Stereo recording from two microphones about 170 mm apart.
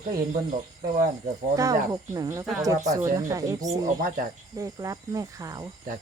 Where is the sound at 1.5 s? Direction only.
20° right (ahead or behind).